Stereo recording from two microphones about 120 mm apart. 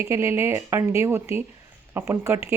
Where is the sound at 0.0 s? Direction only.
25° right (ahead or behind).